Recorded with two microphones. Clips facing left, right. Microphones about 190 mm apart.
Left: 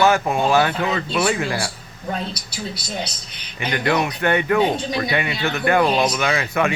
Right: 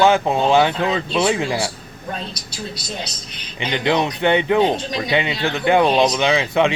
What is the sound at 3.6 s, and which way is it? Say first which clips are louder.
A man's voice: right 1 dB; 20° right (ahead or behind).